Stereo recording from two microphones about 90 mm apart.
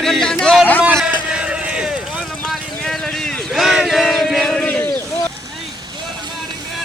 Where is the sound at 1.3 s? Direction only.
10° right (ahead or behind).